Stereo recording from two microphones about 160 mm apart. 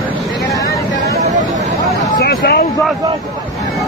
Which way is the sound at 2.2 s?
75° left (ahead or behind).